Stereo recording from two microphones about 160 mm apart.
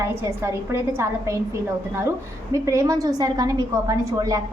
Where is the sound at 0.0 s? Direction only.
15° right (ahead or behind).